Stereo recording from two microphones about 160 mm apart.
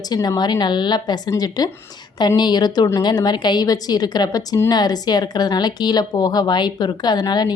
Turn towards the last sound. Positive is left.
turn(degrees=25)  # may be behind; listen again after turning